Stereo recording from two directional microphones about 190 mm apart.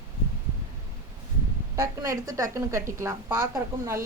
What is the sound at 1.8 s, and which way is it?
A woman's voice, 15° right (ahead or behind).